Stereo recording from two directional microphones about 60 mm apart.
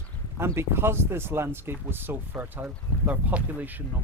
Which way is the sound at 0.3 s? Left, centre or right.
Right.